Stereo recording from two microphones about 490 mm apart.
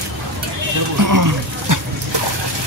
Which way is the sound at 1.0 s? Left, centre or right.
Right.